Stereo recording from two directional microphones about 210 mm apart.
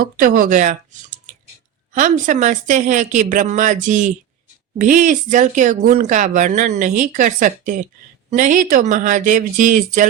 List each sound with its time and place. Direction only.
0.0 s speech: 40° right (ahead or behind)